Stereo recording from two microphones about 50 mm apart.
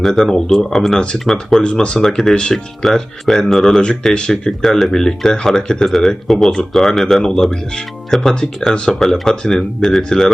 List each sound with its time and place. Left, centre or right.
0.0 s speech: centre
0.9 s speech: centre
1.2 s speech: centre
1.6 s speech: left
2.0 s speech: centre
2.8 s speech: centre
4.1 s speech: centre
4.6 s speech: centre
8.7 s speech: centre
9.0 s speech: centre